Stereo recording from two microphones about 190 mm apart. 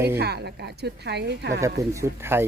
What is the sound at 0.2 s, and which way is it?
A woman's voice, 60° right (ahead or behind).